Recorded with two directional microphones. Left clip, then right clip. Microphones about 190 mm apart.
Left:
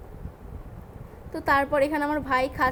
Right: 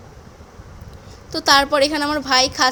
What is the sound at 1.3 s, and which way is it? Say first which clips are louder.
A woman's voice: right 7 dB; 20° right (ahead or behind).